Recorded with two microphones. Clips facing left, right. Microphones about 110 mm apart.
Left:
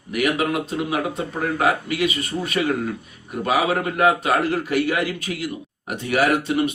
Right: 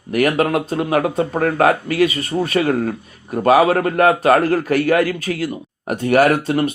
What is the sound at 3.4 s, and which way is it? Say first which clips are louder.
A man's voice: right 8 dB; 45° right (ahead or behind).